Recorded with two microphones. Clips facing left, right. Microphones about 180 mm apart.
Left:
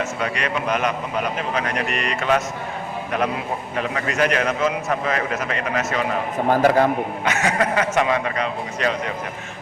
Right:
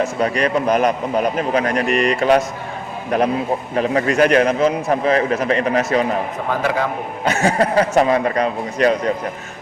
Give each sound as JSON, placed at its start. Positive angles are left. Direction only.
{"t": 0.0, "sound": "a man's voice", "side_deg": -35}
{"t": 6.5, "sound": "a man's voice", "side_deg": 40}
{"t": 7.3, "sound": "a man's voice", "side_deg": -30}